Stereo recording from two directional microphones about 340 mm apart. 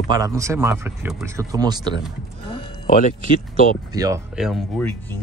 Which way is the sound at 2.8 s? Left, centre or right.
Left.